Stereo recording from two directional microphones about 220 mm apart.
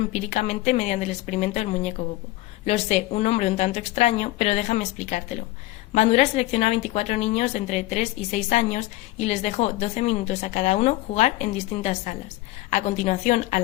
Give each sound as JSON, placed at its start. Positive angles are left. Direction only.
{"t": 0.1, "sound": "a woman's voice", "side_deg": 30}